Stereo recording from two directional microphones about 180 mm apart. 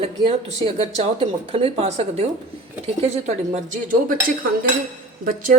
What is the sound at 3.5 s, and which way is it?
Speech, 45° right (ahead or behind).